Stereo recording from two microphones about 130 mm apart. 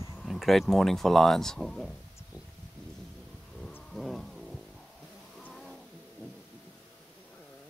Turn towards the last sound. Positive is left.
turn(degrees=5)  # may be behind; listen again after turning